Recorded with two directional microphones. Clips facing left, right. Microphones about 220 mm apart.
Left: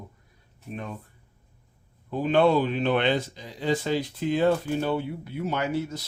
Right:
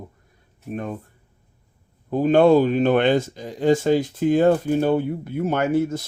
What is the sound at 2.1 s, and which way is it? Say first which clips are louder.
Speech: right 6 dB; 45° right (ahead or behind).